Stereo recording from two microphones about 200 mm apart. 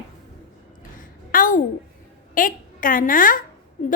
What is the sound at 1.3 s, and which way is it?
A woman's voice, 40° left (ahead or behind).